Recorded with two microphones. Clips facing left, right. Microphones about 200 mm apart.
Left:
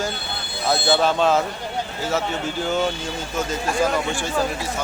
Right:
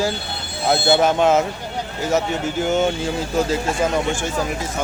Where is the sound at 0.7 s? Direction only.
20° right (ahead or behind).